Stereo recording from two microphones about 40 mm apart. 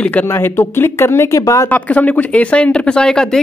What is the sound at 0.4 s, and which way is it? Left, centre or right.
Speech, left.